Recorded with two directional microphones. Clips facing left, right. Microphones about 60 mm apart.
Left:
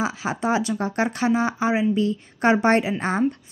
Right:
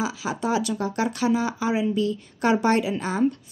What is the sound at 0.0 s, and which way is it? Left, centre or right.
Speech, left.